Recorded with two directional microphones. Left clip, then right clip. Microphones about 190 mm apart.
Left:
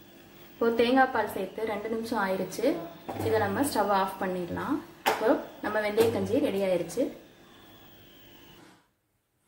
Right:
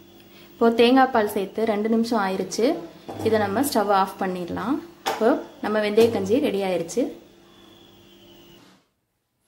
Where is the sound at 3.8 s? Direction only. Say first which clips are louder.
Right 6 dB; 55° right (ahead or behind).